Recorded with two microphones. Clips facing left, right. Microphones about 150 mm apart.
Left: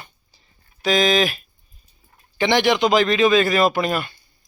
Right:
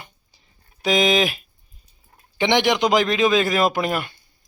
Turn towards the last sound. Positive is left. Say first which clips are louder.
# left 1 dB
turn(degrees=-15)  # may be behind; listen again after turning